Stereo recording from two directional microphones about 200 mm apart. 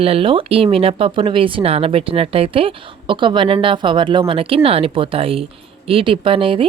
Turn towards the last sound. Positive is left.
turn(degrees=-25)  # may be behind; listen again after turning